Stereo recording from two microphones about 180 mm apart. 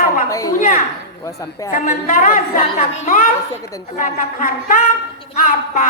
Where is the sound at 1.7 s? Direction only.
50° left (ahead or behind).